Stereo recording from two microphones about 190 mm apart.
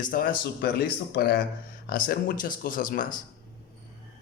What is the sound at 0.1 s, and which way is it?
Speech, 45° left (ahead or behind).